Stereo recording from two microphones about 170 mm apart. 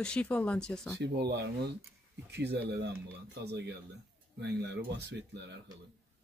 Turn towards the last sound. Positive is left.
turn(degrees=-90)